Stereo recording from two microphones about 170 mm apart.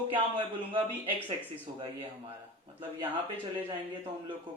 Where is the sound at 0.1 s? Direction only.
30° right (ahead or behind).